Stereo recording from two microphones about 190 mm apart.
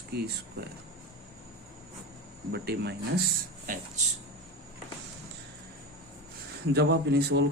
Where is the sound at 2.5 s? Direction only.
60° right (ahead or behind).